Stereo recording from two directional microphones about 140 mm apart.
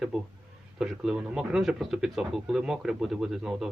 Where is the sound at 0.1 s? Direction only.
Centre (ahead or behind).